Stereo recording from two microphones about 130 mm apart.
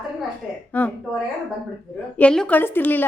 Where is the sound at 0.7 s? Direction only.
10° left (ahead or behind).